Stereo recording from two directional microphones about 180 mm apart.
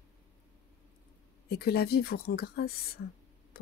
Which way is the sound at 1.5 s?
60° left (ahead or behind).